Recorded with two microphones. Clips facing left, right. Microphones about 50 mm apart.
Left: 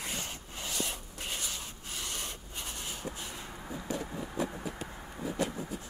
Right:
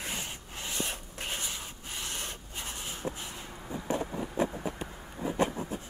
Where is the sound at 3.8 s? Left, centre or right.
Right.